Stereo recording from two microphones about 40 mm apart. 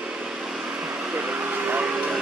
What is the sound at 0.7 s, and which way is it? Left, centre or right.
Vehicle, right.